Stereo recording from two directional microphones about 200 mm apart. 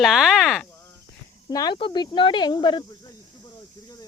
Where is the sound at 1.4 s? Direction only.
20° left (ahead or behind).